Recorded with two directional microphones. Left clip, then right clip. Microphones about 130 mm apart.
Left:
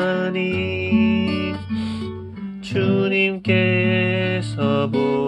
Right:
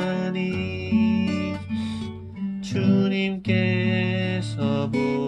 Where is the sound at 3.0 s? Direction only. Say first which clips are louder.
Left 7 dB; 50° right (ahead or behind).